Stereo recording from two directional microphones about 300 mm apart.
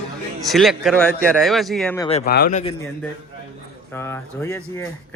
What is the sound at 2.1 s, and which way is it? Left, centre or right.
Speech, left.